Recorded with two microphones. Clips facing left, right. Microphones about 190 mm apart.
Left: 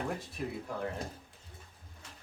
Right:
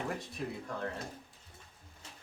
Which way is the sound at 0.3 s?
10° left (ahead or behind).